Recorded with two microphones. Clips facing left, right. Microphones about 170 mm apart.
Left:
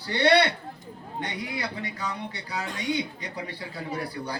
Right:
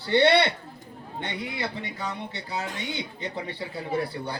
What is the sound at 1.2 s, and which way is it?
A man's voice, 25° right (ahead or behind).